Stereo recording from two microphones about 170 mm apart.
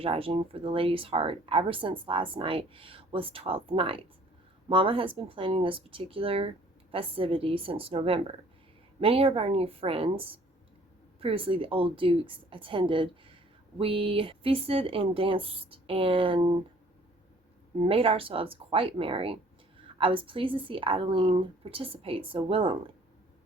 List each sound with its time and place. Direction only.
0.0 s speech: 30° right (ahead or behind)
17.7 s speech: 35° right (ahead or behind)